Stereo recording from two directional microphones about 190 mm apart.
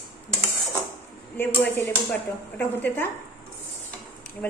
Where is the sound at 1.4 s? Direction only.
10° left (ahead or behind).